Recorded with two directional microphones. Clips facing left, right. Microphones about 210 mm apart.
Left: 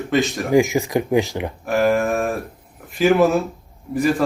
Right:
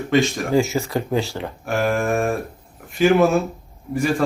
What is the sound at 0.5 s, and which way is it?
Speech, 15° left (ahead or behind).